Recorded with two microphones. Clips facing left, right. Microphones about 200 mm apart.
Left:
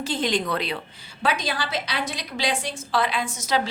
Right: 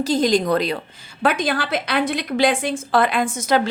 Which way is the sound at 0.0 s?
40° right (ahead or behind).